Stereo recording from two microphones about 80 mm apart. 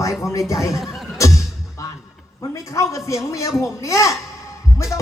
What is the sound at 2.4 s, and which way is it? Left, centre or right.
A man's voice, left.